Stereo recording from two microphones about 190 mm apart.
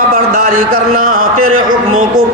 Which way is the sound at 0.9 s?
45° right (ahead or behind).